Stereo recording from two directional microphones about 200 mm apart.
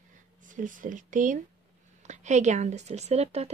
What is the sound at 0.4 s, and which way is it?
Speech, 40° right (ahead or behind).